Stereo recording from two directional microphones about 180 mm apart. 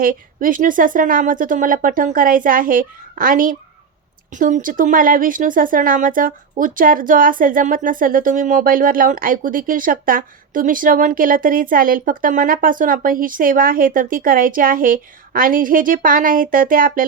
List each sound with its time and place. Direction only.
0.0 s speech: 50° right (ahead or behind)